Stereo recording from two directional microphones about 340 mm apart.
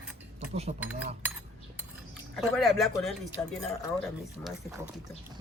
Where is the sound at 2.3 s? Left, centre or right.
Centre.